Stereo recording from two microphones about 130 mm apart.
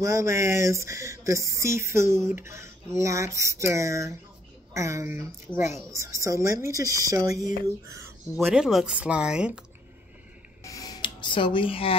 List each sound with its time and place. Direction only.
0.0 s speech: 20° right (ahead or behind)
8.5 s speech: 5° right (ahead or behind)
10.6 s a sound: 25° left (ahead or behind); by 12.0 s 45° left (ahead or behind)